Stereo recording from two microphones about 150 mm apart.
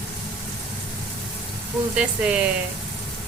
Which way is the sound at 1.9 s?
10° right (ahead or behind).